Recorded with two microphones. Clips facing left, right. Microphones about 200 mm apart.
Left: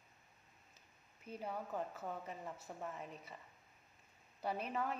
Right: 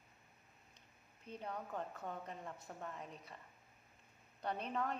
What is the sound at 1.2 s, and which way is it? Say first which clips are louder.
A woman's voice: left 2 dB; 5° left (ahead or behind).